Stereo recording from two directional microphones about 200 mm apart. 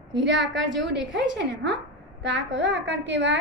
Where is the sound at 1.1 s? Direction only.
60° right (ahead or behind).